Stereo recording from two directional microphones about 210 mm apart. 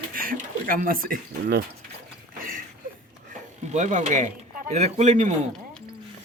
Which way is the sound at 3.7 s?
35° right (ahead or behind).